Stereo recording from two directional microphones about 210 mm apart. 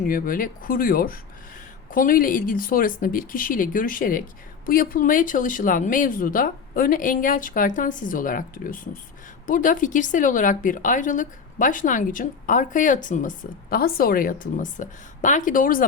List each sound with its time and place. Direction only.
0.1 s a woman's voice: 40° left (ahead or behind)